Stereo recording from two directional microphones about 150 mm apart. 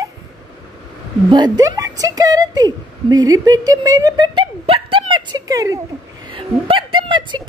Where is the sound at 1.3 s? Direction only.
25° right (ahead or behind).